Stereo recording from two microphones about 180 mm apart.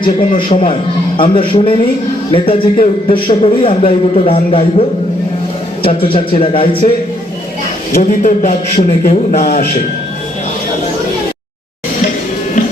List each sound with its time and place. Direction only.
0.0 s a man's voice: 30° left (ahead or behind)
5.8 s a man's voice: 30° left (ahead or behind)
8.2 s a man's voice: 45° left (ahead or behind)